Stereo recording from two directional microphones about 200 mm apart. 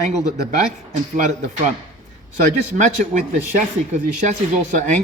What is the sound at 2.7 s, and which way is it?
Speech, 40° right (ahead or behind).